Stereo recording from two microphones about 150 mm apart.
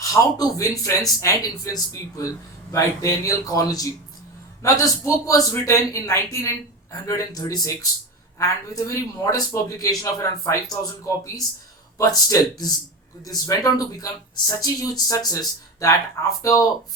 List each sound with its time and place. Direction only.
0.1 s speech: 20° left (ahead or behind)
13.2 s speech: 25° left (ahead or behind)